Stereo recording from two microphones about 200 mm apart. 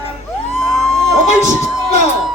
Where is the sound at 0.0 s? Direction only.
30° left (ahead or behind).